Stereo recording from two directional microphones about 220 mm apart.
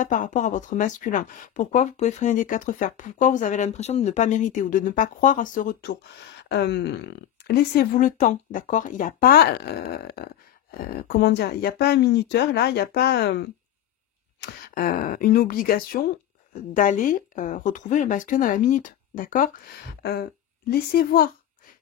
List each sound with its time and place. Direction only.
0.0 s speech: 35° left (ahead or behind)
14.4 s speech: 40° left (ahead or behind)